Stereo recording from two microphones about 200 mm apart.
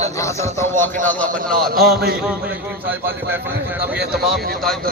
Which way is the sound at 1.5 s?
50° right (ahead or behind).